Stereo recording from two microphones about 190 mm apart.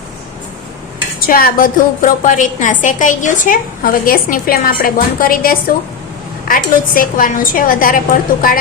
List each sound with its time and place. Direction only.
1.3 s a woman's voice: 50° left (ahead or behind)